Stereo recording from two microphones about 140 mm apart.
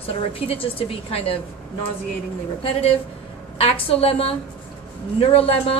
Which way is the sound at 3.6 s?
40° left (ahead or behind).